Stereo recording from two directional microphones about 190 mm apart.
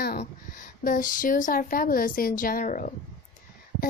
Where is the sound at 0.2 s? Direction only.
45° left (ahead or behind).